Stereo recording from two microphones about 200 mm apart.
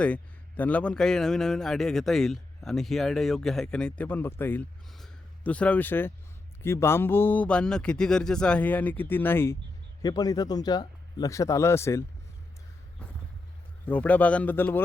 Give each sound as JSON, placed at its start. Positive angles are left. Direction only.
{"t": 0.0, "sound": "a man's voice", "side_deg": 5}
{"t": 13.8, "sound": "speech", "side_deg": 10}